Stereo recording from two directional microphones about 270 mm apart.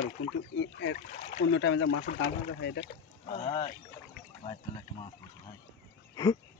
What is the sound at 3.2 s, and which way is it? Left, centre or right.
Speech, left.